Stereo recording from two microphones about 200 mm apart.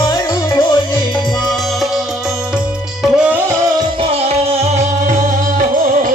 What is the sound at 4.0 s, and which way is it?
Music, 30° right (ahead or behind).